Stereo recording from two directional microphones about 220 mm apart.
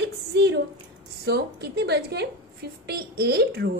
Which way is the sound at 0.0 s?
50° right (ahead or behind).